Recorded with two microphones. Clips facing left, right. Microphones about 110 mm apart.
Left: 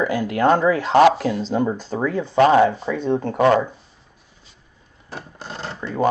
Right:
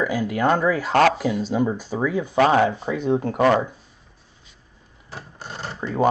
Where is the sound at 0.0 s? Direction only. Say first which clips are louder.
Left 3 dB; centre (ahead or behind).